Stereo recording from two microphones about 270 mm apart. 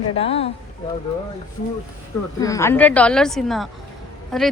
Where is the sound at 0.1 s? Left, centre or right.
Left.